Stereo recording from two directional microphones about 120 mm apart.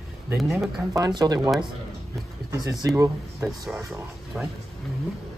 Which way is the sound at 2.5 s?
30° right (ahead or behind).